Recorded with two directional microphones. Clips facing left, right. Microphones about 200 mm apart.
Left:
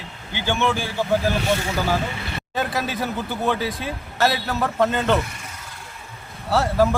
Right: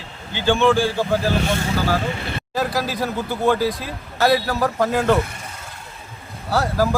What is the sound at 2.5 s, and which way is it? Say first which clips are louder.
Speech: right 2 dB; centre (ahead or behind).